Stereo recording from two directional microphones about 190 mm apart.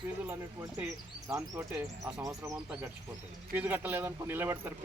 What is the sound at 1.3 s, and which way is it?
Speech, 15° right (ahead or behind).